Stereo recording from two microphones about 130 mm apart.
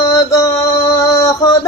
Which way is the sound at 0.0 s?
30° left (ahead or behind).